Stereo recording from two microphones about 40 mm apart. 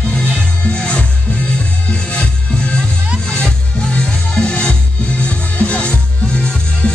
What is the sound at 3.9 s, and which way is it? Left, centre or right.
Music, left.